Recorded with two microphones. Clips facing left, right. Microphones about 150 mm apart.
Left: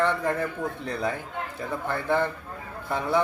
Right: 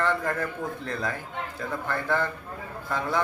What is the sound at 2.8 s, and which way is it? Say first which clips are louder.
Speech: left 3 dB; 20° left (ahead or behind).